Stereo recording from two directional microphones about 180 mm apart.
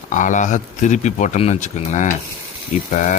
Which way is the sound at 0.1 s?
45° left (ahead or behind).